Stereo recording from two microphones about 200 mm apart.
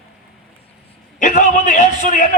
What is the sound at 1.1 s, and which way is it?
A man's voice, 40° left (ahead or behind).